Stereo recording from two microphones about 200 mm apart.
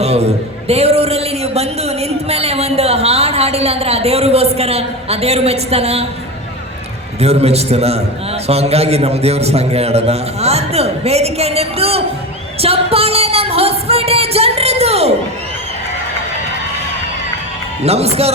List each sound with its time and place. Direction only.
0.0 s a man's voice: 30° right (ahead or behind)
7.2 s a man's voice: 30° right (ahead or behind)
12.6 s music: 30° right (ahead or behind)
17.8 s a man's voice: 30° right (ahead or behind)